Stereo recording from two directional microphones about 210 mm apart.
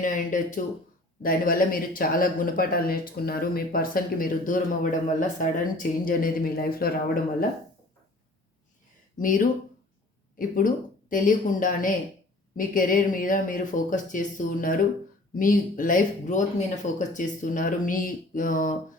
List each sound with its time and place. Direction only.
0.0 s speech: 40° left (ahead or behind)
9.1 s speech: 40° left (ahead or behind)